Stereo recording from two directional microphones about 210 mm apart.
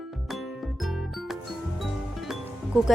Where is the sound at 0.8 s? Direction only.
Centre (ahead or behind).